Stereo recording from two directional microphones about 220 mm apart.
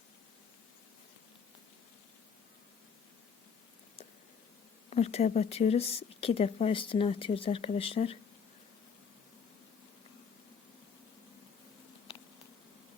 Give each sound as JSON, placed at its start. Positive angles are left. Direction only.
{"t": 4.9, "sound": "speech", "side_deg": 30}